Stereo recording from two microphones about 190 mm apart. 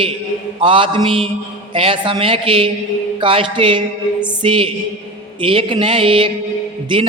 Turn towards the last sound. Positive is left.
turn(degrees=-25)  # may be behind; listen again after turning